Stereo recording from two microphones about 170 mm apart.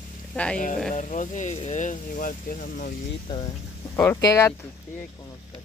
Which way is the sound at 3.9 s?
10° left (ahead or behind).